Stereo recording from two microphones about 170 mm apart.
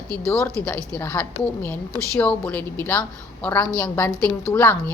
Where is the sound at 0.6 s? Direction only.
10° left (ahead or behind).